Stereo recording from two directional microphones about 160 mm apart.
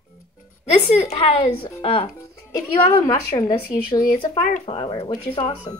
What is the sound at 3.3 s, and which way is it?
Speech, 60° left (ahead or behind).